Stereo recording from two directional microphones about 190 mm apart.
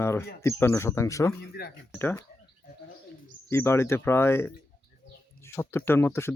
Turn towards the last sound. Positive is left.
turn(degrees=15)  # may be behind; listen again after turning